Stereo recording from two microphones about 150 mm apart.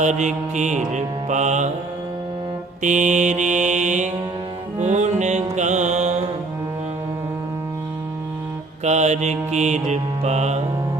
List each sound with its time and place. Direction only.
0.0 s mantra: 55° right (ahead or behind)
2.8 s mantra: 55° right (ahead or behind)
4.8 s music: 50° right (ahead or behind)
8.8 s mantra: 50° right (ahead or behind)